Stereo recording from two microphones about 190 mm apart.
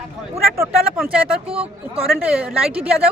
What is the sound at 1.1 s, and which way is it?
Speech, 5° right (ahead or behind).